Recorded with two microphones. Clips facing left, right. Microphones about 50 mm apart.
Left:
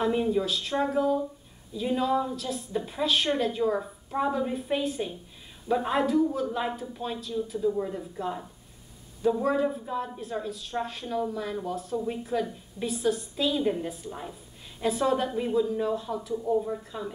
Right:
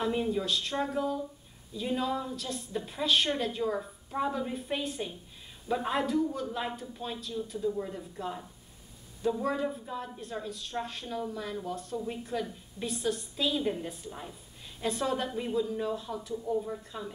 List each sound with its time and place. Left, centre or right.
0.0 s a woman's voice: centre
16.3 s a woman's voice: centre
16.6 s a woman's voice: centre